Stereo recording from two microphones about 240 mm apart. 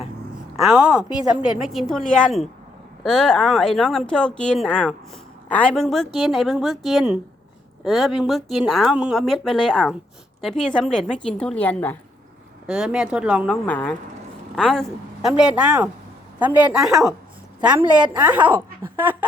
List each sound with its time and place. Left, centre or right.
0.6 s speech: centre
13.7 s speech: centre
17.7 s a woman's voice: centre
18.2 s a woman's voice: centre